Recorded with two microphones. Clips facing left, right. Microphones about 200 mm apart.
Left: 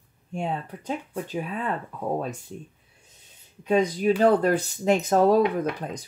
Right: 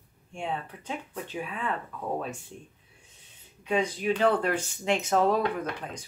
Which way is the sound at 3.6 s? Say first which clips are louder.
Left 6 dB; 40° left (ahead or behind).